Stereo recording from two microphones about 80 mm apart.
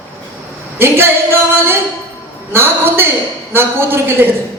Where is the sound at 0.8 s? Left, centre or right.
Right.